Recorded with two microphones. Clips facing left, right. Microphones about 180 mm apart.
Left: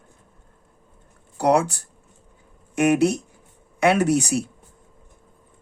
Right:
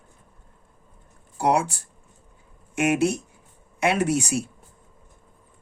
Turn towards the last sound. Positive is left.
turn(degrees=65)  # may be behind; listen again after turning